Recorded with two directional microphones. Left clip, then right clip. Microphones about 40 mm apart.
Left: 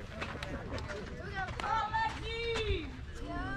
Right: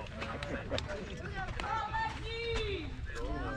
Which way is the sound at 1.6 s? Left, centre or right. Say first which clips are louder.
Left 3 dB; left.